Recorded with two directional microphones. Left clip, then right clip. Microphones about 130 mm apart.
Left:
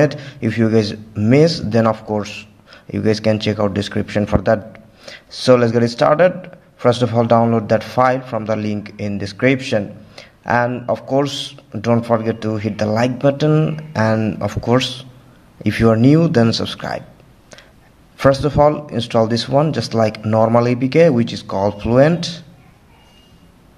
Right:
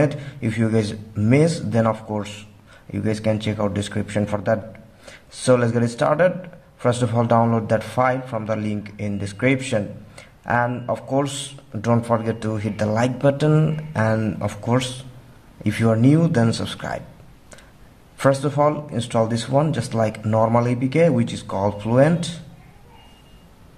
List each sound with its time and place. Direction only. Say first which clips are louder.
0.0 s a man's voice: left 5 dB; 30° left (ahead or behind)
18.1 s a man's voice: left 5 dB; 25° left (ahead or behind)